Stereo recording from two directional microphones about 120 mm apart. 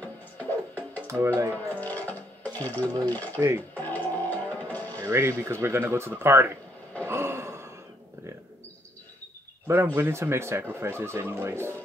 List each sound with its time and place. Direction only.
0.4 s music: 15° left (ahead or behind)
1.0 s speech: 20° right (ahead or behind)
1.8 s sewing machine: 15° left (ahead or behind)
3.3 s speech: 20° right (ahead or behind)
3.7 s music: 15° left (ahead or behind)
5.0 s speech: 20° right (ahead or behind)
7.1 s a sound: 20° right (ahead or behind)
9.9 s speech: 20° right (ahead or behind)